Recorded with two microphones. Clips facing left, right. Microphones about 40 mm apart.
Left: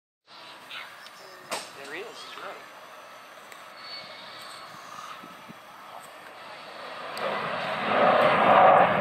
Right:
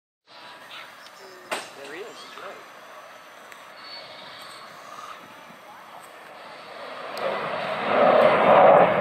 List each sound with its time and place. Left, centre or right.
1.5 s vehicle: right
6.7 s vehicle: centre